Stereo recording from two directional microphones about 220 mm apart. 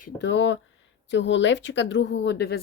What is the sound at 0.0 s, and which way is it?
Speech, 55° left (ahead or behind).